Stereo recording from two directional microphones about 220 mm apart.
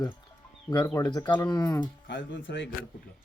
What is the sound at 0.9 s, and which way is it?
Speech, 15° left (ahead or behind).